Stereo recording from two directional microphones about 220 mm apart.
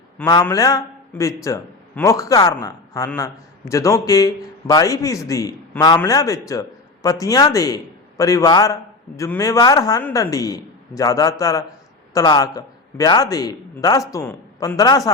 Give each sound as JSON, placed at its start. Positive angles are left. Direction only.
{"t": 0.2, "sound": "a man's voice", "side_deg": 10}